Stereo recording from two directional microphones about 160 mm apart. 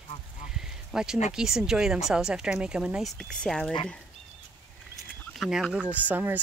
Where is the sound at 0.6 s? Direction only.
5° right (ahead or behind).